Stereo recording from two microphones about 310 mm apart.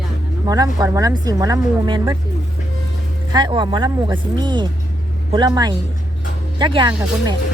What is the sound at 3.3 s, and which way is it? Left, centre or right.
Speech, centre.